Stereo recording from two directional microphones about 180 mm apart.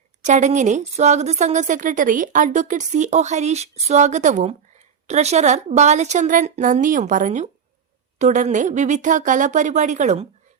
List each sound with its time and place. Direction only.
0.2 s a woman's voice: 40° right (ahead or behind)